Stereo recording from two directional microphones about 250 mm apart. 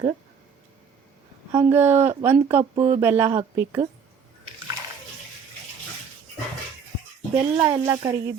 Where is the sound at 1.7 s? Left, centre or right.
Centre.